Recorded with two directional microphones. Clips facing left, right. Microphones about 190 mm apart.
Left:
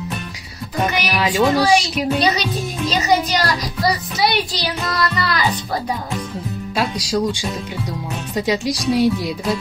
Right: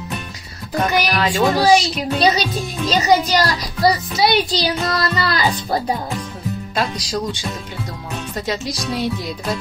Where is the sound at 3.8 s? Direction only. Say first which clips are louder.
Right 3 dB; 25° right (ahead or behind).